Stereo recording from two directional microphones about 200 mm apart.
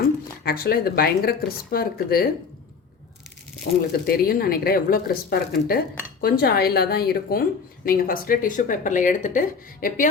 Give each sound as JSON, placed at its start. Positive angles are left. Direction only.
{"t": 0.4, "sound": "speech", "side_deg": 50}
{"t": 3.7, "sound": "speech", "side_deg": 45}